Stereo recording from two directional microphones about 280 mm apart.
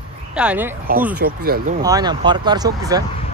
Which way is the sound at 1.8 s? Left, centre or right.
Centre.